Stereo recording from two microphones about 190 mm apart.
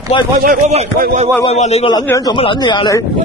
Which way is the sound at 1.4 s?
35° left (ahead or behind).